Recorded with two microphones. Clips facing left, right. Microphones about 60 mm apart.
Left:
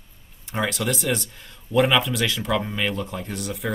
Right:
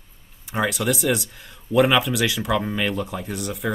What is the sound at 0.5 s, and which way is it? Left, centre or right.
Speech, centre.